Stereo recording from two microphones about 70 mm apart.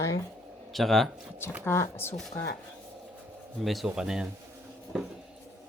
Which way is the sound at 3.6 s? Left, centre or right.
Centre.